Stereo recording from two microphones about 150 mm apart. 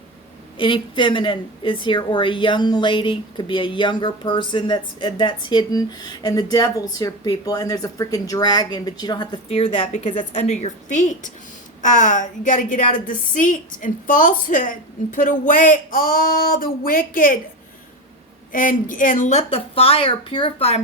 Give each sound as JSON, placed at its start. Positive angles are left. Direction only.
{"t": 0.5, "sound": "speech", "side_deg": 35}
{"t": 9.5, "sound": "a woman's voice", "side_deg": 40}
{"t": 18.5, "sound": "speech", "side_deg": 65}